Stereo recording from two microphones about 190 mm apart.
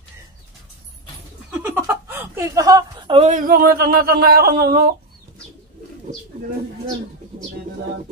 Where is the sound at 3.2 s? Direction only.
45° right (ahead or behind).